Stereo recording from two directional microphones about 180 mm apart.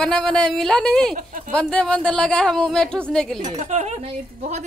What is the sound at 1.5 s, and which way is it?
Speech, 5° left (ahead or behind).